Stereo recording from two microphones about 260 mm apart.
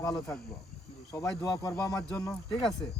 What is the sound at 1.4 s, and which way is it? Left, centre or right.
Speech, centre.